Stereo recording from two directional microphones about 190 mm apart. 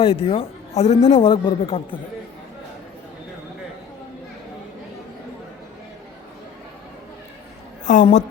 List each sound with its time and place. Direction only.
0.0 s a man's voice: 30° left (ahead or behind)
7.9 s a woman's voice: 40° left (ahead or behind)